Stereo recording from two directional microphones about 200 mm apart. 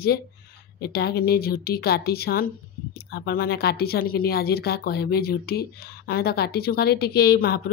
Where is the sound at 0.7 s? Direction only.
50° left (ahead or behind).